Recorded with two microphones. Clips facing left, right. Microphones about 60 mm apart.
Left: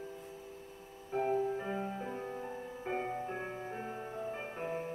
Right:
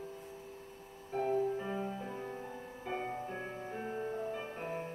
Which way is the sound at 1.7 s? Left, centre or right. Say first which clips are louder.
Even; centre.